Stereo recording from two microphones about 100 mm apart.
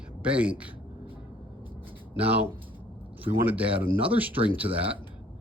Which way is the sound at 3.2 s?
15° right (ahead or behind).